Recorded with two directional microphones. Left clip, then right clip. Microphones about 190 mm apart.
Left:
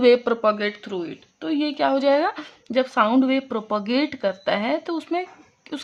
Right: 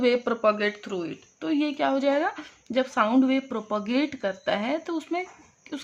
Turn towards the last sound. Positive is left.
turn(degrees=25)  # may be behind; listen again after turning